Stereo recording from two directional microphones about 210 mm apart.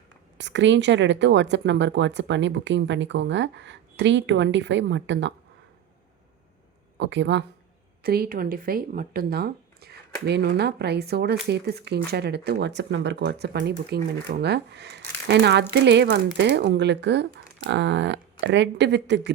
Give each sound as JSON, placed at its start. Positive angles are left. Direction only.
{"t": 0.3, "sound": "speech", "side_deg": -60}
{"t": 7.0, "sound": "speech", "side_deg": -60}
{"t": 8.0, "sound": "speech", "side_deg": -45}